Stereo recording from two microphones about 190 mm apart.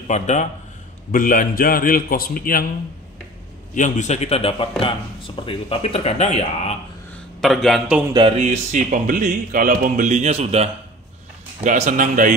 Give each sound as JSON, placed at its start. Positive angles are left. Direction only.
{"t": 0.1, "sound": "a man's voice", "side_deg": 40}
{"t": 3.7, "sound": "speech", "side_deg": 40}
{"t": 7.4, "sound": "speech", "side_deg": 0}
{"t": 8.1, "sound": "music", "side_deg": -25}
{"t": 8.4, "sound": "speech", "side_deg": -40}